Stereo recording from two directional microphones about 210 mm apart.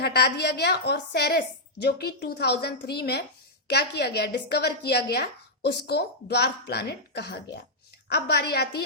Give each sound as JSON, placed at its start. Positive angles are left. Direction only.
{"t": 0.0, "sound": "a woman's voice", "side_deg": 50}